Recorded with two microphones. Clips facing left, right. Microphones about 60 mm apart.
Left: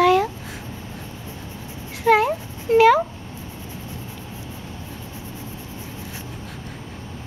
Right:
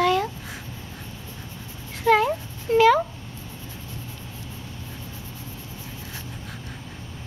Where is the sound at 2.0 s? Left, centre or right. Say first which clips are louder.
Left 2 dB; centre.